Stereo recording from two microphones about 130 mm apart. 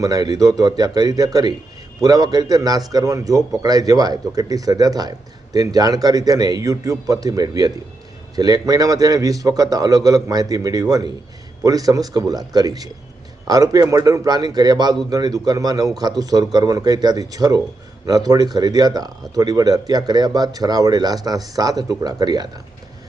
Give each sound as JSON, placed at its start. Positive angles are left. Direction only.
{"t": 0.0, "sound": "a man's voice", "side_deg": -30}